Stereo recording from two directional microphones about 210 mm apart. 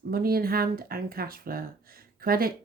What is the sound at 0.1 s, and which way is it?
Speech, 45° right (ahead or behind).